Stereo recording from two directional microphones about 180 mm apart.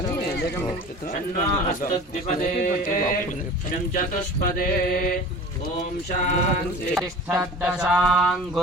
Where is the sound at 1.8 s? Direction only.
50° left (ahead or behind).